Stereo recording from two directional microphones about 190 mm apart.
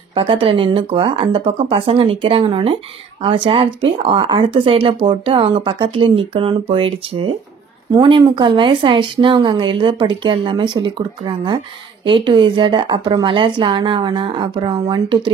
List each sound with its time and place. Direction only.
0.1 s speech: 30° right (ahead or behind)